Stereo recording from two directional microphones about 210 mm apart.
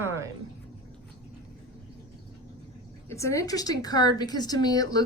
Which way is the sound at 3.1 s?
15° left (ahead or behind).